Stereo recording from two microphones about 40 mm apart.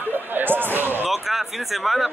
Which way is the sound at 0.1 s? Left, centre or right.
Right.